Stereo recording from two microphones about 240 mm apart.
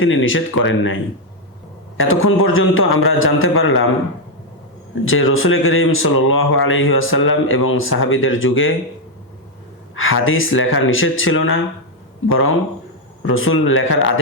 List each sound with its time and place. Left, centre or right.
0.0 s speech: left
2.0 s speech: left
5.0 s speech: left
9.9 s speech: left